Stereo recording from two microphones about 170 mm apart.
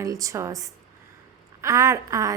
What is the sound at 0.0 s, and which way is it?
A woman's voice, 20° right (ahead or behind).